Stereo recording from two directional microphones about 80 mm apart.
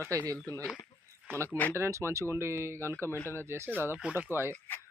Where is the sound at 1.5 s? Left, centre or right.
Left.